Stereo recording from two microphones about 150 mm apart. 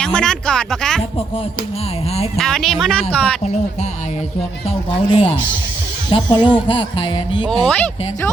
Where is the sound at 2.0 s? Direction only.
45° left (ahead or behind).